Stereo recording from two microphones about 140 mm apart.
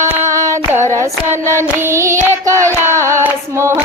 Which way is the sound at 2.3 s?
20° right (ahead or behind).